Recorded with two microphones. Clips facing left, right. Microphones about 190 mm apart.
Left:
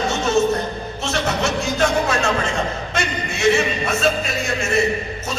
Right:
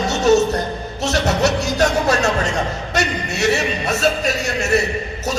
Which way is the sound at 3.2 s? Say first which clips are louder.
Left 5 dB; 70° right (ahead or behind).